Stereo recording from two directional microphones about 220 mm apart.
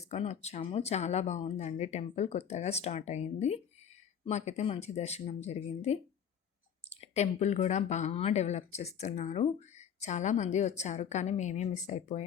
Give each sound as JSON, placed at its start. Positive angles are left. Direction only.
{"t": 0.1, "sound": "speech", "side_deg": 30}